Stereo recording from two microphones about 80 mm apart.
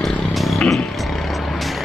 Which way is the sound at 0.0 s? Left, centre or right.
Centre.